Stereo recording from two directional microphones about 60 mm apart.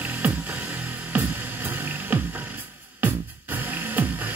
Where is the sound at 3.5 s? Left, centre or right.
Right.